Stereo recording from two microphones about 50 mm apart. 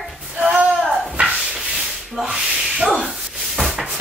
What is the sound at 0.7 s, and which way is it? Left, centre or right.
Speech, centre.